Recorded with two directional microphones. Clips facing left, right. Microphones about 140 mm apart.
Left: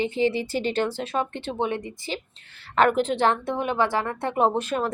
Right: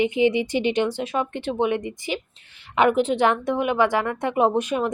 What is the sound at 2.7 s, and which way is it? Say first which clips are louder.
A woman's voice: right 2 dB; 5° right (ahead or behind).